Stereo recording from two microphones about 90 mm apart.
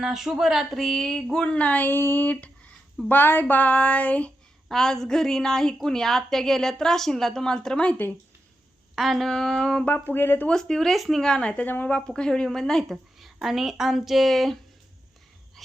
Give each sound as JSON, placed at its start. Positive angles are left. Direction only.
{"t": 0.0, "sound": "speech", "side_deg": -5}
{"t": 9.0, "sound": "speech", "side_deg": 0}
{"t": 9.8, "sound": "speech", "side_deg": 20}
{"t": 10.5, "sound": "speech", "side_deg": 5}